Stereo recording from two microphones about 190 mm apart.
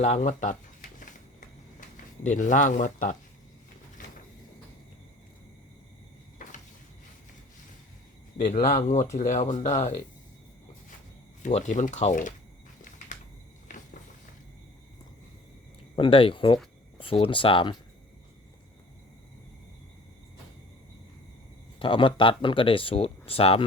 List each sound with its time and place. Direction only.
0.0 s a sound: 40° left (ahead or behind)
2.2 s speech: 40° left (ahead or behind)
6.4 s a sound: 45° left (ahead or behind)
8.4 s speech: 40° left (ahead or behind)
11.4 s speech: 40° left (ahead or behind)
13.7 s cupboard open or close: 45° left (ahead or behind)
16.0 s speech: 30° left (ahead or behind)
21.8 s speech: 25° left (ahead or behind)